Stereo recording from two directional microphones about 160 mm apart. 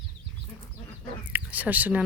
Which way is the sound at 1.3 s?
10° right (ahead or behind).